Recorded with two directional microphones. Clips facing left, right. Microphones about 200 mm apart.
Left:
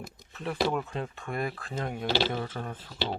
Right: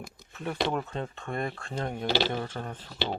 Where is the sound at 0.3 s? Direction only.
Centre (ahead or behind).